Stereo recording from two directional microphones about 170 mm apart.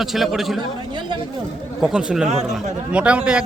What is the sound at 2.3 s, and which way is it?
Speech, 40° right (ahead or behind).